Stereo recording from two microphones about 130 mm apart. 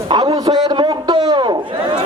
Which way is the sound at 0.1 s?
35° right (ahead or behind).